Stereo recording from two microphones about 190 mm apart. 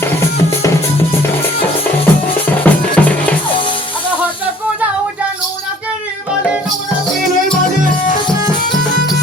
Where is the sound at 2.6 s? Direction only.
5° left (ahead or behind).